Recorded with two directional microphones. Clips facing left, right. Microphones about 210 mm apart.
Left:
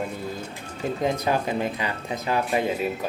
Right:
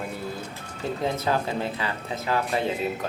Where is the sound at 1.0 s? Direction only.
15° left (ahead or behind).